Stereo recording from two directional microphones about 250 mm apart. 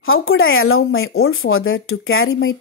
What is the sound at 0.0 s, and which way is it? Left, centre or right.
A woman's voice, left.